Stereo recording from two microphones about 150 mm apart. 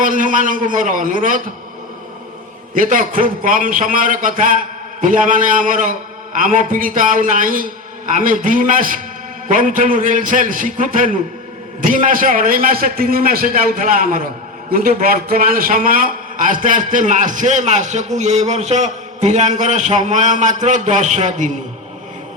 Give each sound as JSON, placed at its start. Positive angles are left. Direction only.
{"t": 0.0, "sound": "a man's voice", "side_deg": -60}
{"t": 2.7, "sound": "a man's voice", "side_deg": -60}